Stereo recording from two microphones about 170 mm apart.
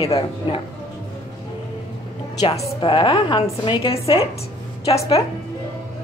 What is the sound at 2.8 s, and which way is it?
Speech, 30° left (ahead or behind).